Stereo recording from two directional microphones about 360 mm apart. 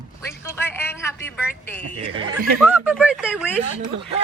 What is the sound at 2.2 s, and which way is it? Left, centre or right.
Speech, right.